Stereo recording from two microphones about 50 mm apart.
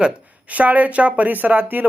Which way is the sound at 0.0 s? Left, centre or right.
Right.